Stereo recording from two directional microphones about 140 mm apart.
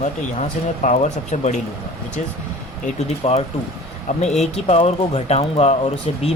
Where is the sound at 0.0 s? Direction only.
60° left (ahead or behind).